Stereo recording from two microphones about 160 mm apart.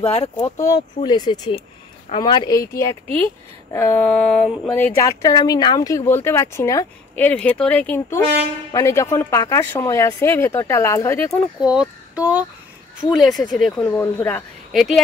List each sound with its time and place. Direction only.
0.0 s speech: 40° left (ahead or behind)
0.4 s speech: 20° left (ahead or behind)
7.2 s speech: 10° left (ahead or behind)
11.6 s speech: 5° right (ahead or behind)
13.8 s speech: 15° left (ahead or behind)